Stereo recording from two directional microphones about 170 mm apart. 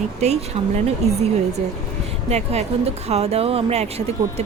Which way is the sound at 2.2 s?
40° right (ahead or behind).